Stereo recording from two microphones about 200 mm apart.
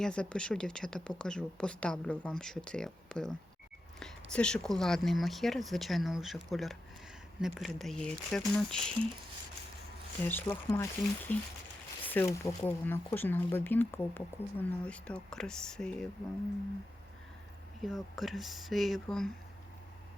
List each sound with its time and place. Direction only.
0.0 s speech: 5° left (ahead or behind)
10.2 s speech: 10° left (ahead or behind)
17.8 s speech: centre (ahead or behind)